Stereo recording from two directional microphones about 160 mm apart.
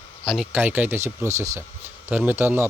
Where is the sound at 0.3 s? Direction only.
5° right (ahead or behind).